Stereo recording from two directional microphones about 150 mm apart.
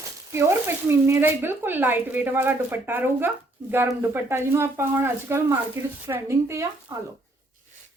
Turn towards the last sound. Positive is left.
turn(degrees=-20)  # may be behind; listen again after turning